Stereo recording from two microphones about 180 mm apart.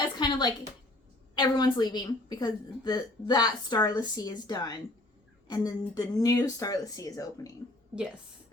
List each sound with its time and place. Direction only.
0.2 s a woman's voice: 25° left (ahead or behind)